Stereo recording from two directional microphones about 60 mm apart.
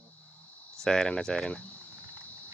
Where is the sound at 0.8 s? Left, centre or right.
Centre.